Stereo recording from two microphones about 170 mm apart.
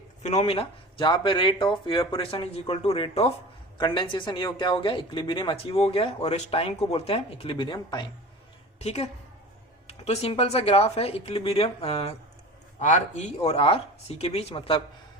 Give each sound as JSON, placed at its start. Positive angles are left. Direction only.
{"t": 0.2, "sound": "speech", "side_deg": 40}
{"t": 8.8, "sound": "a woman's voice", "side_deg": 40}